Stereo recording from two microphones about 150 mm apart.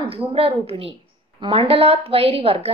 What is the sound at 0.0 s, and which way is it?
A woman's voice, 40° right (ahead or behind).